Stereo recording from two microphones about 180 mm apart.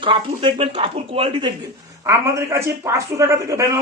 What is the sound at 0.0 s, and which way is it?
Speech, 30° right (ahead or behind).